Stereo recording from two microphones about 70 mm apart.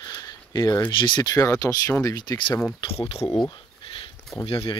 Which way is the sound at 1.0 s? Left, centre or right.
Left.